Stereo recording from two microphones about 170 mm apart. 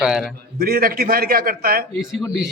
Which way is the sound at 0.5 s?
60° right (ahead or behind).